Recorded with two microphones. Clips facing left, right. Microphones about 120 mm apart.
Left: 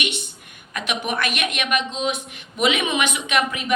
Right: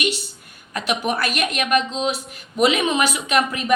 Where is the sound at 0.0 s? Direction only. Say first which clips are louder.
Right 4 dB; 35° right (ahead or behind).